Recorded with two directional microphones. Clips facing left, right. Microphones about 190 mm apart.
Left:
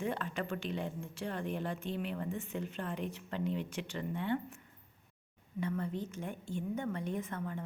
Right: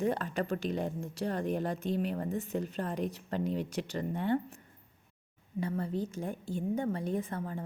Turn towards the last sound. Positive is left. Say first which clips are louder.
# right 4 dB
turn(degrees=-35)  # may be behind; listen again after turning